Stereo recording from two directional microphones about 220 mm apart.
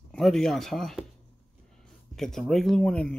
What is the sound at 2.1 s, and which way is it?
Speech, centre (ahead or behind).